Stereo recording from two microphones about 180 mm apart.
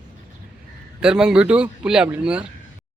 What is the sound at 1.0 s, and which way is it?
A man's voice, 5° right (ahead or behind).